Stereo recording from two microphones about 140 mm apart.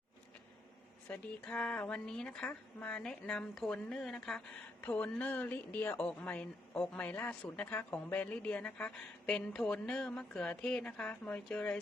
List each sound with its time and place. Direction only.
1.0 s a woman's voice: 10° left (ahead or behind)